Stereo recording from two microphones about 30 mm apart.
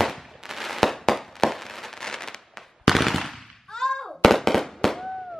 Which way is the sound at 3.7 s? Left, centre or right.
Centre.